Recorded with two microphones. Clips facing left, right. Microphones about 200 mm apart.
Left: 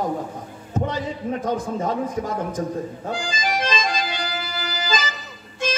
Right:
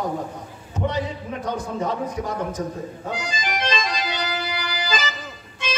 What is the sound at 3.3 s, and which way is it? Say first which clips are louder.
Accordion: left 1 dB; 45° left (ahead or behind).